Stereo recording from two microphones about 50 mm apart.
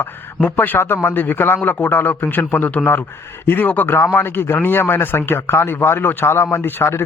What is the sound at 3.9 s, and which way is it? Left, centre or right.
A man's voice, left.